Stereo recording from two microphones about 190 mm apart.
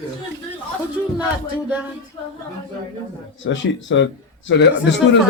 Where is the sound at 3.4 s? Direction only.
75° left (ahead or behind).